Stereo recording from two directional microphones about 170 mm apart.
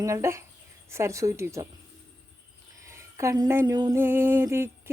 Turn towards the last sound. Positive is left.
turn(degrees=-15)  # may be behind; listen again after turning